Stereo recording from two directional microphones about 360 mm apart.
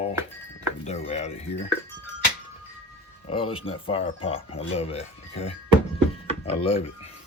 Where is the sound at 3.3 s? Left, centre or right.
Centre.